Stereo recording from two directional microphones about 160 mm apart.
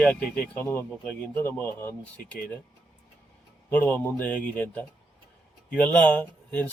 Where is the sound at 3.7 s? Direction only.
10° left (ahead or behind).